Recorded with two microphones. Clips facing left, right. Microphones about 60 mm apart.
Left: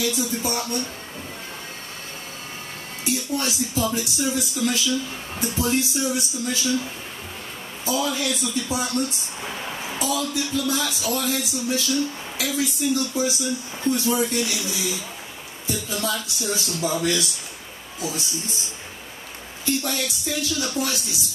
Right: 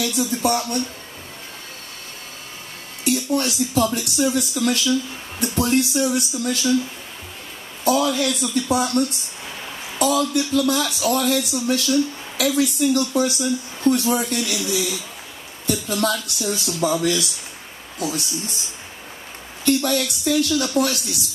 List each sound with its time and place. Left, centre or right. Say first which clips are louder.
0.0 s speech: right 4 dB; right
3.0 s speech: right 5 dB; right
7.8 s speech: right 6 dB; right
17.0 s speech: right 2 dB; left
18.0 s speech: right 4 dB; right
19.6 s speech: right 6 dB; right